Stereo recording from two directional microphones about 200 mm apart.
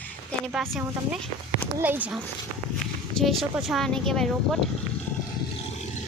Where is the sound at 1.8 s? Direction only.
10° right (ahead or behind).